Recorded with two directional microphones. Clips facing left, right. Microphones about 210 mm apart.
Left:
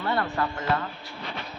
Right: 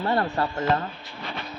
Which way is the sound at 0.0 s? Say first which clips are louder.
Right 3 dB; 30° right (ahead or behind).